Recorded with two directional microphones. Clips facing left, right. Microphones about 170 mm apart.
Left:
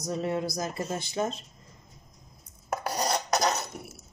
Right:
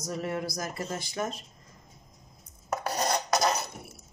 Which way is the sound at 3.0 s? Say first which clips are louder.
Even; 5° left (ahead or behind).